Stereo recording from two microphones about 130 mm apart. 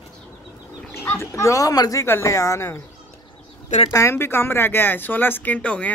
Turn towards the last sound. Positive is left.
turn(degrees=10)  # may be behind; listen again after turning